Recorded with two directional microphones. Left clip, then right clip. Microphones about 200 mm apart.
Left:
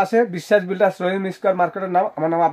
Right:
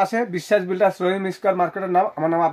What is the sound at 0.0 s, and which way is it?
Speech, 40° left (ahead or behind).